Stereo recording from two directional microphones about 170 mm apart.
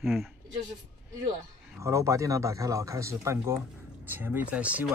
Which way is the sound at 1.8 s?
15° right (ahead or behind).